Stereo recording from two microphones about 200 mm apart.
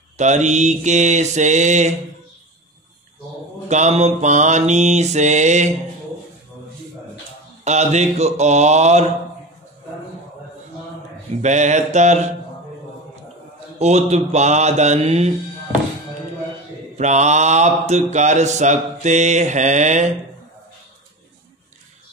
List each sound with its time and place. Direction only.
0.2 s mantra: 35° right (ahead or behind)
3.6 s mantra: 35° right (ahead or behind)
7.6 s mantra: 35° right (ahead or behind)
11.4 s mantra: 35° right (ahead or behind)
13.7 s mantra: 35° right (ahead or behind)
16.9 s mantra: 35° right (ahead or behind)